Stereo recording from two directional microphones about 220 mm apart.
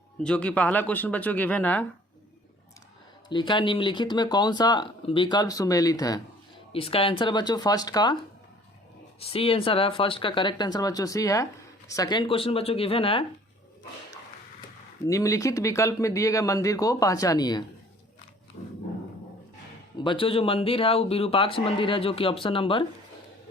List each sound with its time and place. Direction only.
0.2 s speech: 5° left (ahead or behind)
3.2 s speech: 20° left (ahead or behind)
9.2 s speech: 25° left (ahead or behind)
15.0 s speech: 15° left (ahead or behind)
20.0 s speech: 20° left (ahead or behind)